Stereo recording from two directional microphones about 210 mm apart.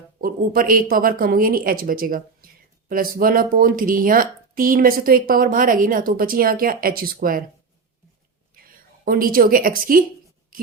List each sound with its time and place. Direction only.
0.2 s speech: 45° right (ahead or behind)
8.5 s a woman's voice: 45° right (ahead or behind)